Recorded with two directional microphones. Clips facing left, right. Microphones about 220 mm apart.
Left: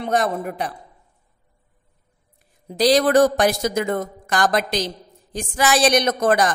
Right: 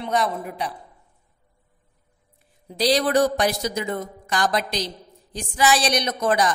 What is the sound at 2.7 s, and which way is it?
A woman's voice, 45° left (ahead or behind).